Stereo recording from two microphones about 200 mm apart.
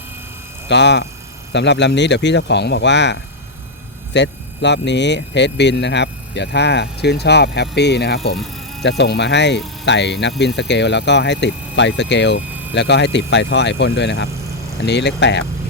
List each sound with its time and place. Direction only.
0.7 s speech: 60° left (ahead or behind)